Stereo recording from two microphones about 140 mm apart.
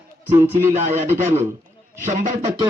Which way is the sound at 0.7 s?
55° right (ahead or behind).